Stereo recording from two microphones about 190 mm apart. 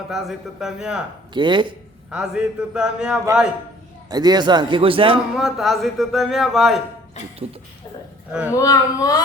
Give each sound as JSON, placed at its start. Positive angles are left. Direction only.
{"t": 0.1, "sound": "speech", "side_deg": 0}
{"t": 1.3, "sound": "speech", "side_deg": -25}
{"t": 2.0, "sound": "speech", "side_deg": -5}
{"t": 4.1, "sound": "speech", "side_deg": -20}
{"t": 5.3, "sound": "speech", "side_deg": 0}
{"t": 7.2, "sound": "speech", "side_deg": 35}
{"t": 8.3, "sound": "speech", "side_deg": -5}
{"t": 8.5, "sound": "a child's voice", "side_deg": 20}